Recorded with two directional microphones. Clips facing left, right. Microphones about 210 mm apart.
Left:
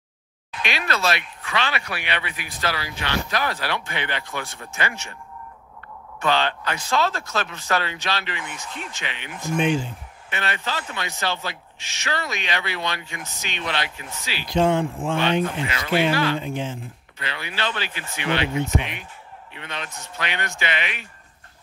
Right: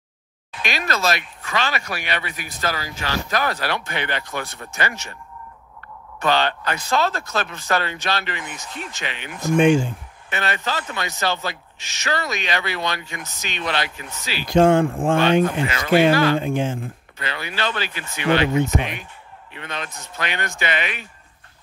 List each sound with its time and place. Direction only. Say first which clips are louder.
0.7 s speech: right 2 dB; 40° right (ahead or behind)
6.1 s speech: right 2 dB; 40° right (ahead or behind)